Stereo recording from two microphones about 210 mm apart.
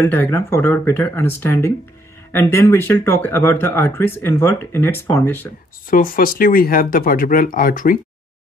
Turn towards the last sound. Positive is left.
turn(degrees=40)  # may be behind; listen again after turning